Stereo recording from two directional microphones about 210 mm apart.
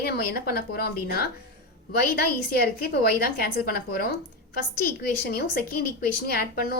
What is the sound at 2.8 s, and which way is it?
A woman's voice, 45° left (ahead or behind).